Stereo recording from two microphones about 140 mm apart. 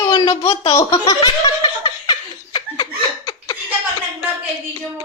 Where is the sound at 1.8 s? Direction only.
35° left (ahead or behind).